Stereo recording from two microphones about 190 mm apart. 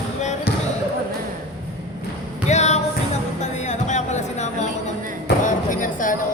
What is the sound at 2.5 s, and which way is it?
Music, 35° left (ahead or behind).